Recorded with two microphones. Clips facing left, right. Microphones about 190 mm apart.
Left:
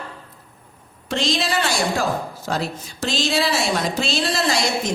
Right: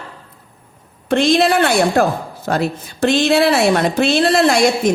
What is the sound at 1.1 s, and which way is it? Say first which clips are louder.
A woman's voice: right 9 dB; 55° right (ahead or behind).